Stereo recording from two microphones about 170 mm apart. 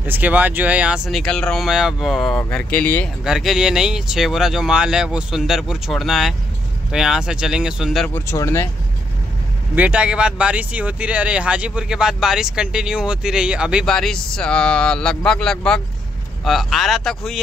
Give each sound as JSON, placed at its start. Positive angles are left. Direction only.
{"t": 0.0, "sound": "speech", "side_deg": -10}
{"t": 3.3, "sound": "speech", "side_deg": 0}
{"t": 8.1, "sound": "speech", "side_deg": 15}
{"t": 9.8, "sound": "speech", "side_deg": -5}